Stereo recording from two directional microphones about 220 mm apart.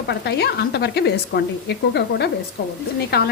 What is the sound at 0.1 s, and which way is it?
A woman's voice, 50° left (ahead or behind).